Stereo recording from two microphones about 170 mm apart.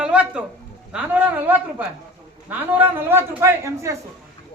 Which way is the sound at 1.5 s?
10° right (ahead or behind).